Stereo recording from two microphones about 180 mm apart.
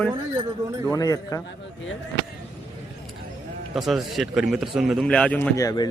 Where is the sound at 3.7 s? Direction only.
Centre (ahead or behind).